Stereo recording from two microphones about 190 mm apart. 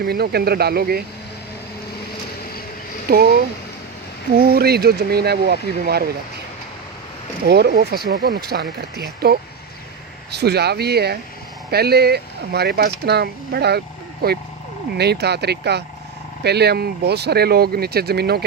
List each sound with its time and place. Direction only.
0.0 s speech: 55° right (ahead or behind)
3.1 s speech: 50° right (ahead or behind)
4.4 s speech: 55° right (ahead or behind)
7.4 s speech: 55° right (ahead or behind)